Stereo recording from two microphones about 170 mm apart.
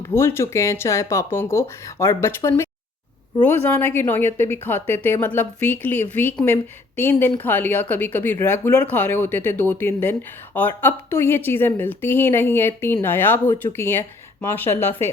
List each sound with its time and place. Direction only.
0.0 s speech: 15° left (ahead or behind)